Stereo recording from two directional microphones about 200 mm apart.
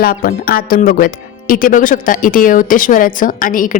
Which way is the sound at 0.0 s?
45° left (ahead or behind).